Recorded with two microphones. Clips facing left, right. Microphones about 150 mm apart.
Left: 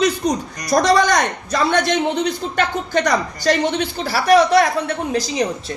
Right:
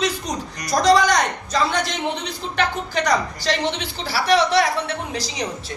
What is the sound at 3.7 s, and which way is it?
Speech, 45° left (ahead or behind).